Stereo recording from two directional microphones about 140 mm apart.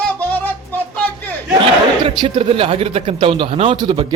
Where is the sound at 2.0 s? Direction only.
35° right (ahead or behind).